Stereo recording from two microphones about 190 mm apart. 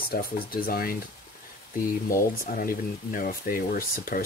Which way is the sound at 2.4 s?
50° left (ahead or behind).